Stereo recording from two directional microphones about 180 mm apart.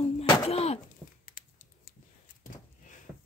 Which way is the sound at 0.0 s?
35° left (ahead or behind).